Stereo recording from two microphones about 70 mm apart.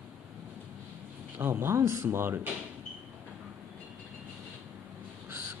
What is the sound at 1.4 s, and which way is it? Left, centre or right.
Speech, right.